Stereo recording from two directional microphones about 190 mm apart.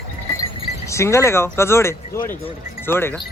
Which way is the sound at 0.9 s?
15° left (ahead or behind).